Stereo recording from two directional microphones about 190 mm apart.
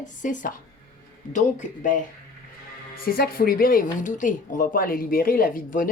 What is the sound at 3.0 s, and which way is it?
Speech, 55° left (ahead or behind).